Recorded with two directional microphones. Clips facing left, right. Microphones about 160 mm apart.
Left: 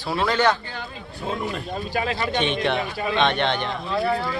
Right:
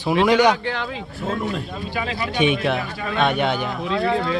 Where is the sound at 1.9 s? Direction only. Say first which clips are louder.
Left 2 dB; 45° left (ahead or behind).